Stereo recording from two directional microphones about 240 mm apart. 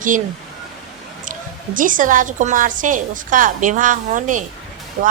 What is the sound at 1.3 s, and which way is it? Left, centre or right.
A woman's voice, right.